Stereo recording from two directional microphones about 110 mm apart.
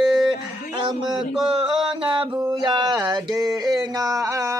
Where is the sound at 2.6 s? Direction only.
40° right (ahead or behind).